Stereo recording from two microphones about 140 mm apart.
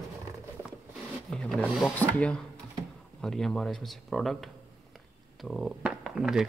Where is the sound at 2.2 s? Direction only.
5° left (ahead or behind).